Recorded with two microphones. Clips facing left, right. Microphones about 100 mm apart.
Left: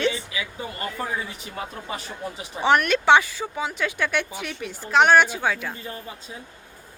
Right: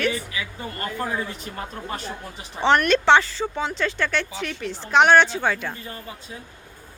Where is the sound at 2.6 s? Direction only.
5° left (ahead or behind).